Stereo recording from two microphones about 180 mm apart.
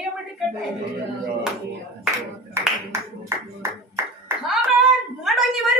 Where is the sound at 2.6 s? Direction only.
15° right (ahead or behind).